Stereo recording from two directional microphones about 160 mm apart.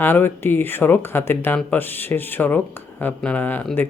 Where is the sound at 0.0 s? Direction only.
15° left (ahead or behind).